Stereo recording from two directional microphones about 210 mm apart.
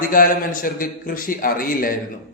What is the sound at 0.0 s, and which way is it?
A man's voice, 40° left (ahead or behind).